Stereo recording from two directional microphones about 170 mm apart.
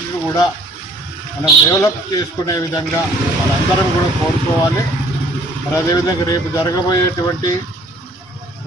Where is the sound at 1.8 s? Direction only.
20° left (ahead or behind).